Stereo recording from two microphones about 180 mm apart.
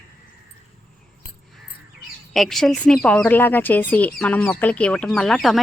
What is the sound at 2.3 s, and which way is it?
Speech, centre (ahead or behind).